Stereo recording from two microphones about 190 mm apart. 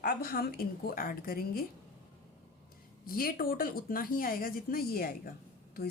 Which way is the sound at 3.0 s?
50° left (ahead or behind).